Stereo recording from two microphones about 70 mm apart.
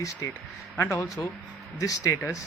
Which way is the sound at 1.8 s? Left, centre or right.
Left.